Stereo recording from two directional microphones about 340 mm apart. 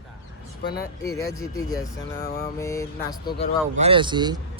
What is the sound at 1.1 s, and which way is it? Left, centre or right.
Speech, centre.